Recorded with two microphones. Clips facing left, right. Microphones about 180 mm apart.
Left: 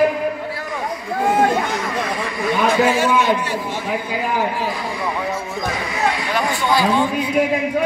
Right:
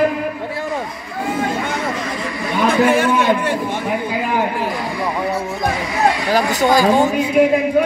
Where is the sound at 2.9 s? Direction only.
55° right (ahead or behind).